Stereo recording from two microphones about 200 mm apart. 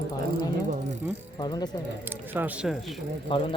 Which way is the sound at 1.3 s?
20° left (ahead or behind).